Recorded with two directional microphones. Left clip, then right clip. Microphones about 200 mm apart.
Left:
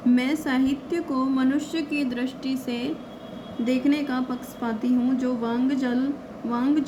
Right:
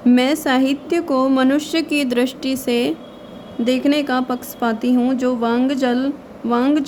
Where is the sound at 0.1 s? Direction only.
50° right (ahead or behind).